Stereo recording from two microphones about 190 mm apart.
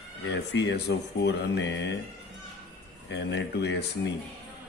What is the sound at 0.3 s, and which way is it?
Speech, 65° left (ahead or behind).